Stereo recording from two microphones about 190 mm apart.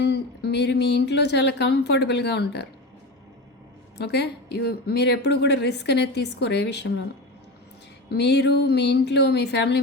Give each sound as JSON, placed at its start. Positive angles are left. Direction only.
{"t": 0.0, "sound": "speech", "side_deg": 60}
{"t": 3.9, "sound": "speech", "side_deg": 60}
{"t": 8.1, "sound": "speech", "side_deg": 65}